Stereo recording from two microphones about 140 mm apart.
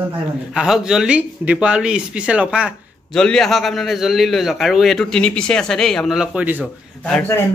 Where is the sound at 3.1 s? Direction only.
5° left (ahead or behind); by 6.6 s 10° right (ahead or behind).